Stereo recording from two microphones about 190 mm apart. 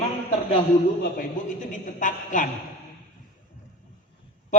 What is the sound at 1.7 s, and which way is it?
Speech, 45° left (ahead or behind).